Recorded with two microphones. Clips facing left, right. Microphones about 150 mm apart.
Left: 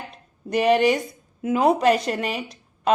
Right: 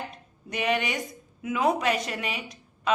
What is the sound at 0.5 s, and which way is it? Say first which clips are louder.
A woman's voice: left 9 dB; 35° left (ahead or behind).